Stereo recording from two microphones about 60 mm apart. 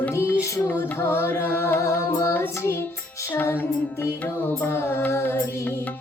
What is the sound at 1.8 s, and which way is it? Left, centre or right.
Music, left.